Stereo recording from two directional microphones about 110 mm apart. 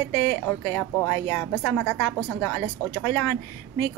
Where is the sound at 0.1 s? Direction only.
25° left (ahead or behind).